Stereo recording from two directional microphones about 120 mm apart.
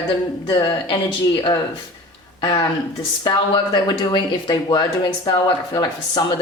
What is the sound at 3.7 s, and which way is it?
Speech, 40° left (ahead or behind).